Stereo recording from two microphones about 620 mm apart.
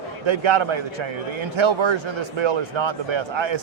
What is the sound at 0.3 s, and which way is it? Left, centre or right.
Speech, right.